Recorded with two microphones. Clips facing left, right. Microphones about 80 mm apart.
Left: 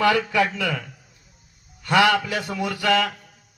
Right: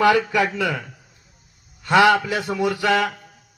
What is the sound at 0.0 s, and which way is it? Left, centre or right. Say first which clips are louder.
A man's voice: right 2 dB; centre.